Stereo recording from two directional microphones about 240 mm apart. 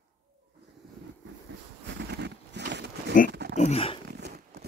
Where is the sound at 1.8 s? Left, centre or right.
Right.